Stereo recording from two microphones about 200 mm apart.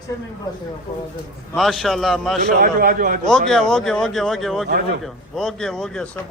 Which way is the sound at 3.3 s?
Centre (ahead or behind).